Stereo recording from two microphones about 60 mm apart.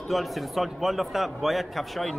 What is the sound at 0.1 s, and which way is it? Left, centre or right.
A man's voice, centre.